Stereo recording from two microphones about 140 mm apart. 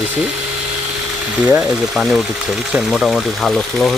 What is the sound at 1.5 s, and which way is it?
Speech, 5° right (ahead or behind).